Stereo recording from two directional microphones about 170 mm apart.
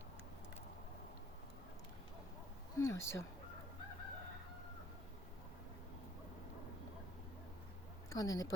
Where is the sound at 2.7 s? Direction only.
15° left (ahead or behind).